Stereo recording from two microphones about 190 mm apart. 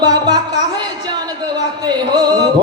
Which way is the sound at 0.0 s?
20° right (ahead or behind).